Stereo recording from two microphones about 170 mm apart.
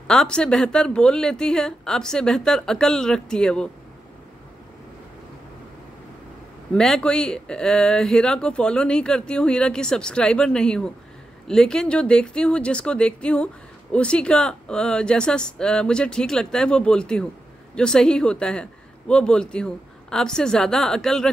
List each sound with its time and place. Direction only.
0.0 s speech: 5° left (ahead or behind)
6.7 s speech: 5° left (ahead or behind)